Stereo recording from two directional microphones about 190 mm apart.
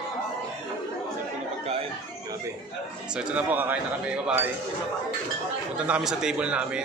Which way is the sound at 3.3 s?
10° right (ahead or behind).